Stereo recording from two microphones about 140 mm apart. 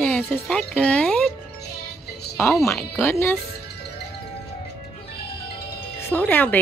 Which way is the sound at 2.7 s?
15° left (ahead or behind).